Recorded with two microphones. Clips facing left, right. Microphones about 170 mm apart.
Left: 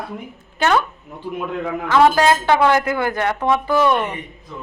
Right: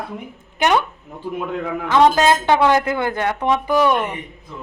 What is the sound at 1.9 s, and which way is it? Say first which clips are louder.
A woman's voice: even; 20° right (ahead or behind).